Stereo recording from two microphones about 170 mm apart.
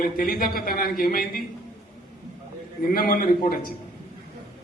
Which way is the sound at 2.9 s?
60° left (ahead or behind).